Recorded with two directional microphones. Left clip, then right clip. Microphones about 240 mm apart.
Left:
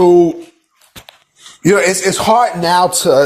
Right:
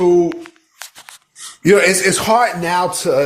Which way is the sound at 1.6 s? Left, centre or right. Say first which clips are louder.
Even; centre.